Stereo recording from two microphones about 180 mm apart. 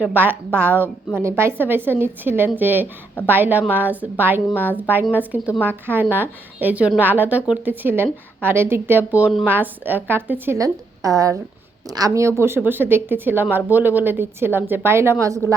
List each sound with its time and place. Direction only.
0.0 s a woman's voice: 10° right (ahead or behind)